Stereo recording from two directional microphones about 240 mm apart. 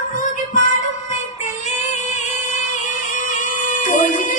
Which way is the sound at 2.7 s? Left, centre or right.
Left.